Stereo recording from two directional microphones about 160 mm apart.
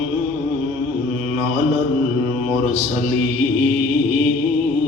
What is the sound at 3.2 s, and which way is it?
Music, 45° right (ahead or behind).